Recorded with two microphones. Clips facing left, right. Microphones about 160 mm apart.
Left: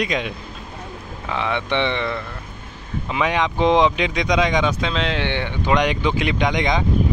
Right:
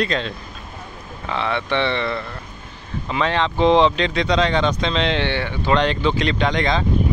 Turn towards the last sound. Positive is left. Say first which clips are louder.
# even
turn(degrees=15)  # may be behind; listen again after turning